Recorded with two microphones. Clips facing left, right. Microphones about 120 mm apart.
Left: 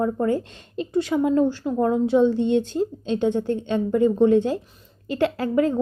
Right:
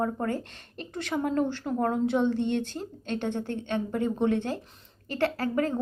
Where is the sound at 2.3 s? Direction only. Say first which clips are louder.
Left 6 dB; 50° right (ahead or behind).